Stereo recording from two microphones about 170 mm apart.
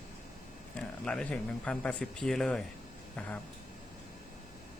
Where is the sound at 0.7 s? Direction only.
5° left (ahead or behind).